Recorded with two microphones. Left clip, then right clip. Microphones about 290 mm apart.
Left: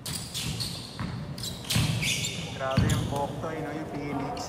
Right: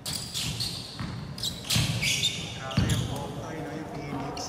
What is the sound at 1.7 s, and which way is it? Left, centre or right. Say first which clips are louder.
Basketball bounce: right 2 dB; centre.